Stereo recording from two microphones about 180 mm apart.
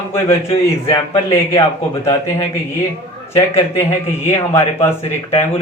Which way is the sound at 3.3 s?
15° left (ahead or behind).